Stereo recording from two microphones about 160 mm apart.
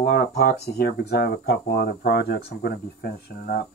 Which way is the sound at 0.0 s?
70° left (ahead or behind).